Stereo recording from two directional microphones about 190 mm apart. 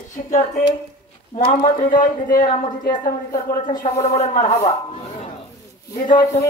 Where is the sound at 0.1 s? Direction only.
40° left (ahead or behind).